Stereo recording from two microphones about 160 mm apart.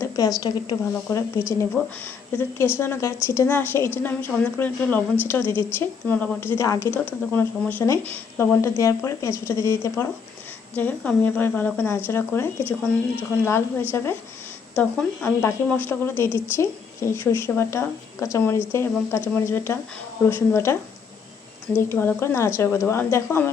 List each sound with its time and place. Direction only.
0.0 s a woman's voice: 25° left (ahead or behind)
21.8 s a woman's voice: 15° left (ahead or behind)